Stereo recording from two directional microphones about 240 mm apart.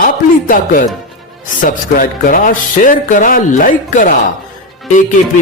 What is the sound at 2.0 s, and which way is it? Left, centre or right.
Speech, left.